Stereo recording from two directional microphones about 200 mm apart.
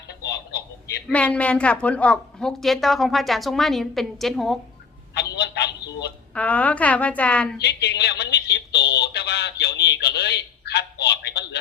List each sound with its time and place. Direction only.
1.0 s a woman's voice: 5° left (ahead or behind)
5.1 s telephone: 55° left (ahead or behind)
6.3 s a woman's voice: 5° left (ahead or behind)
7.6 s a woman's voice: 55° left (ahead or behind)